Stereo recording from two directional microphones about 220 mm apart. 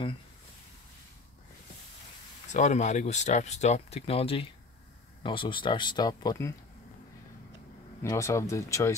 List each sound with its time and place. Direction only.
2.5 s speech: 35° left (ahead or behind); by 6.5 s 15° left (ahead or behind)
8.0 s speech: 15° left (ahead or behind)